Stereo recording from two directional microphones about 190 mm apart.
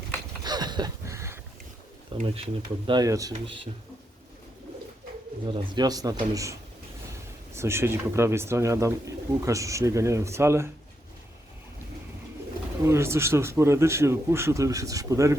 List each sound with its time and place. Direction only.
0.4 s a sound: 20° right (ahead or behind)
2.2 s speech: 30° right (ahead or behind)
5.5 s speech: 25° right (ahead or behind)
12.8 s speech: 15° right (ahead or behind)